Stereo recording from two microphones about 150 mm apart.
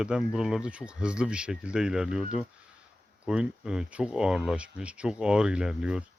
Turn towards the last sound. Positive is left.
turn(degrees=-5)  # may be behind; listen again after turning